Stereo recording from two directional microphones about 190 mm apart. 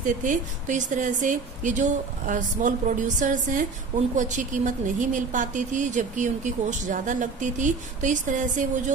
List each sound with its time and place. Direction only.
0.0 s a woman's voice: 45° right (ahead or behind)